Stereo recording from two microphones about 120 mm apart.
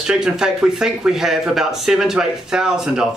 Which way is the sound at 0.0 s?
5° right (ahead or behind).